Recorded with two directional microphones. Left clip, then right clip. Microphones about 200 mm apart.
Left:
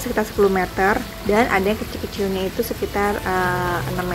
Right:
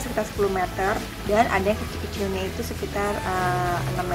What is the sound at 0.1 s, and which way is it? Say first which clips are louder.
Speech: left 6 dB; 25° left (ahead or behind).